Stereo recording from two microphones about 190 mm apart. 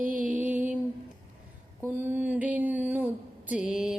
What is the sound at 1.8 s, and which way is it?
Mantra, 10° right (ahead or behind).